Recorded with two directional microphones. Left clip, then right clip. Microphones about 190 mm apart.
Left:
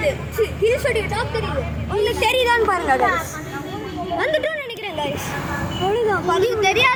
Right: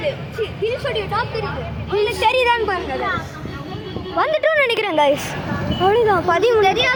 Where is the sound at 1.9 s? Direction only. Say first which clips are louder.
Right 2 dB; 35° right (ahead or behind).